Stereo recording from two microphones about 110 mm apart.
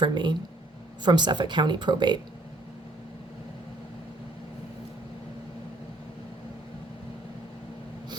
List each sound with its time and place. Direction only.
0.0 s speech: 45° right (ahead or behind)